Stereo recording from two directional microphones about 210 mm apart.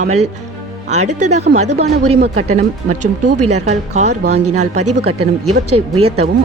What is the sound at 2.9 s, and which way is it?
Speech, 90° right.